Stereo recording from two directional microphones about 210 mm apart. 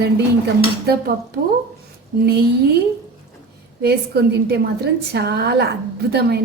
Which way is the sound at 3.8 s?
50° right (ahead or behind).